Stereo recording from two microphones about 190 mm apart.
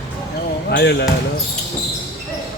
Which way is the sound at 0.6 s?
60° left (ahead or behind).